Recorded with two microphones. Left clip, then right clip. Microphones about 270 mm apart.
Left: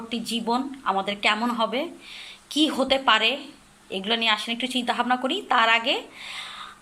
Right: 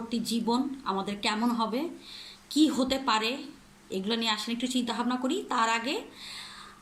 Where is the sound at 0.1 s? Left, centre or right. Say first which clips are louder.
Left 4 dB; centre.